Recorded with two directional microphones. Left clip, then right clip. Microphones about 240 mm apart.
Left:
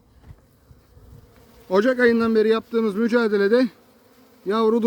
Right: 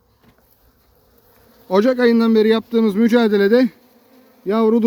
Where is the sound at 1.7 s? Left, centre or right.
Right.